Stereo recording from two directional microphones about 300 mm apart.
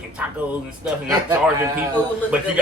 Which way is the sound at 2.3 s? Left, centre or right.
Centre.